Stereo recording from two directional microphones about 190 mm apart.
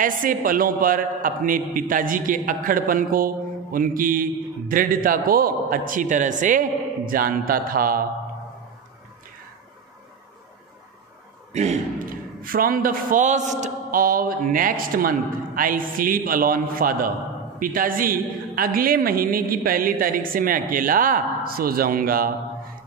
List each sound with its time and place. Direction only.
0.0 s a woman's voice: 45° right (ahead or behind)
11.5 s a woman's voice: 35° right (ahead or behind)